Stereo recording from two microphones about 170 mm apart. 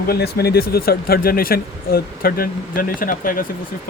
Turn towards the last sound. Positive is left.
turn(degrees=55)  # may be behind; listen again after turning